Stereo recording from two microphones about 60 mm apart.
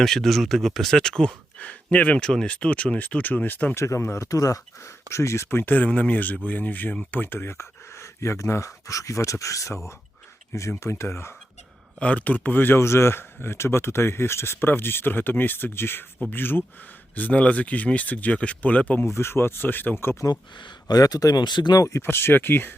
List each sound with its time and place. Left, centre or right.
0.0 s speech: centre
1.5 s speech: left
3.8 s speech: left
5.0 s speech: left
5.5 s speech: left
11.9 s speech: left
12.8 s speech: left
17.2 s speech: left
19.0 s speech: left
20.9 s speech: left
22.0 s speech: left